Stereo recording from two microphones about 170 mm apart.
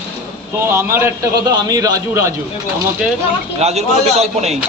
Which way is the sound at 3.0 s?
5° right (ahead or behind).